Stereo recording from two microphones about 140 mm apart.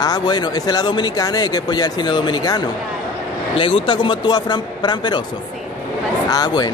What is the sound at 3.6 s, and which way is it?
Speech, 40° left (ahead or behind).